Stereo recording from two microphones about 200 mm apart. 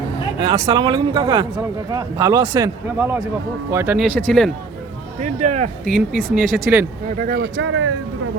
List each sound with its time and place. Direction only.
0.3 s speech: 20° right (ahead or behind)
3.9 s speech: 5° left (ahead or behind)
5.2 s speech: 40° right (ahead or behind)
5.8 s speech: centre (ahead or behind)
7.2 s speech: 50° right (ahead or behind); by 7.9 s 85° right